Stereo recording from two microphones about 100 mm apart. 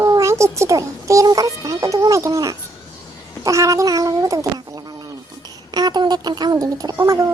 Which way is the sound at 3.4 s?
35° right (ahead or behind).